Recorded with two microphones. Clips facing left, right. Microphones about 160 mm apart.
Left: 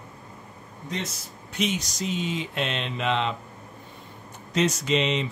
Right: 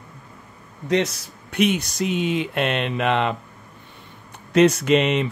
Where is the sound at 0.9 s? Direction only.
75° right (ahead or behind); by 3.3 s 60° right (ahead or behind).